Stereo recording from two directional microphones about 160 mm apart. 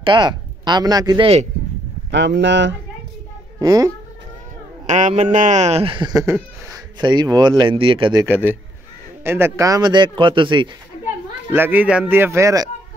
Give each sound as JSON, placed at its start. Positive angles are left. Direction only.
{"t": 0.0, "sound": "speech", "side_deg": -30}
{"t": 2.0, "sound": "speech", "side_deg": -90}
{"t": 3.5, "sound": "speech", "side_deg": -25}
{"t": 4.8, "sound": "speech", "side_deg": -50}
{"t": 8.3, "sound": "a man's voice", "side_deg": -10}
{"t": 11.5, "sound": "speech", "side_deg": -10}